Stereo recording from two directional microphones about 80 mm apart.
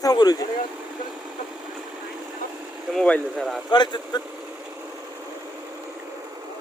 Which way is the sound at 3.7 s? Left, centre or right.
Left.